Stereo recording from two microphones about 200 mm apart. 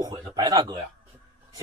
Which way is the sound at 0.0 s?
15° right (ahead or behind).